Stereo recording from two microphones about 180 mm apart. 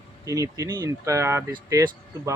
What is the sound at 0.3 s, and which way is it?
Speech, 20° right (ahead or behind).